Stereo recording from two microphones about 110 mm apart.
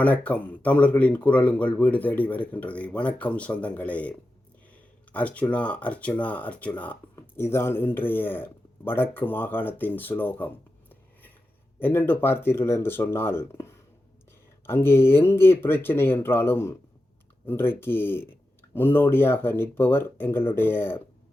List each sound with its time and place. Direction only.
0.0 s speech: 15° left (ahead or behind)